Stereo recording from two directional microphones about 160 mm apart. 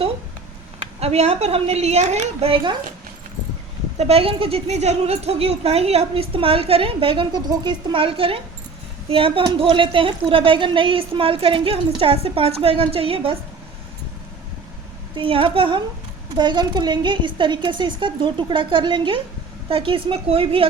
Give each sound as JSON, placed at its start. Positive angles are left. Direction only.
{"t": 0.9, "sound": "speech", "side_deg": -40}
{"t": 3.9, "sound": "speech", "side_deg": -40}
{"t": 15.1, "sound": "a woman's voice", "side_deg": -35}